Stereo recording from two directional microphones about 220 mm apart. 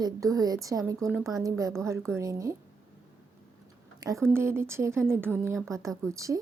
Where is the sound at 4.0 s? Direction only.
15° right (ahead or behind).